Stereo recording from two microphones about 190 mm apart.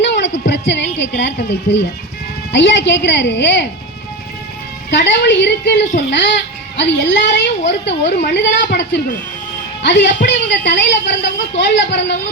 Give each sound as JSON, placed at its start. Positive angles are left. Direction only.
{"t": 0.0, "sound": "music", "side_deg": 70}
{"t": 0.9, "sound": "a woman's voice", "side_deg": 70}
{"t": 4.9, "sound": "a woman's voice", "side_deg": 70}